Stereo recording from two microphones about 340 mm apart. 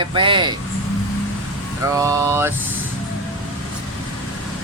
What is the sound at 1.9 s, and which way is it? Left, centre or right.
Speech, centre.